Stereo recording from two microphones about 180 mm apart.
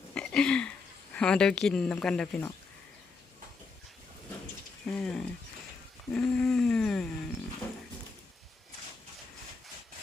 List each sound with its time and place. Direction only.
0.1 s a sound: 5° left (ahead or behind)
1.1 s speech: 5° left (ahead or behind)
4.9 s speech: 5° left (ahead or behind)